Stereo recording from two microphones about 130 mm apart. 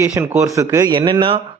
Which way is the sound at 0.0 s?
20° right (ahead or behind).